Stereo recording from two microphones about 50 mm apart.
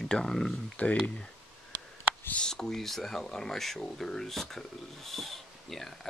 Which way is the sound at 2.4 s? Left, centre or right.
Centre.